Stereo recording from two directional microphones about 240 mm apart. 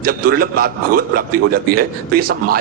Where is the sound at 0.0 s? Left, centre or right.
Right.